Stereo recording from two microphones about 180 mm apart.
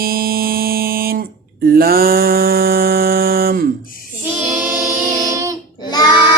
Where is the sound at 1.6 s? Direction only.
55° right (ahead or behind).